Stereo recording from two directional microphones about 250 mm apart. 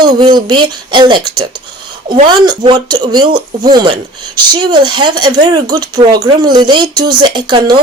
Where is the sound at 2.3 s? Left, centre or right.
Centre.